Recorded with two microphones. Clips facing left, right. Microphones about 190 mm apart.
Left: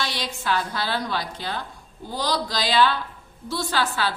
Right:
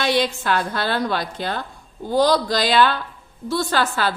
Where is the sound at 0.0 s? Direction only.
55° right (ahead or behind).